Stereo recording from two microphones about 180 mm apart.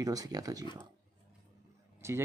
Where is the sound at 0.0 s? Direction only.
20° right (ahead or behind).